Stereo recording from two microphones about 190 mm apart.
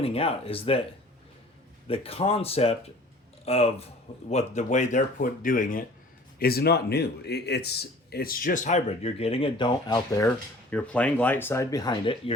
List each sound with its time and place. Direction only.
0.0 s speech: 30° left (ahead or behind)
1.9 s speech: 30° left (ahead or behind)